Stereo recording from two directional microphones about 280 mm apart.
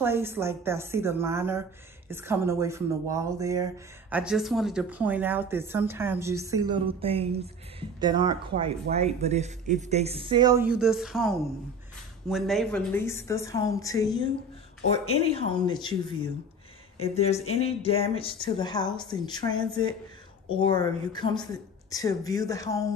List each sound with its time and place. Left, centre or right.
0.0 s a woman's voice: centre
17.0 s a woman's voice: left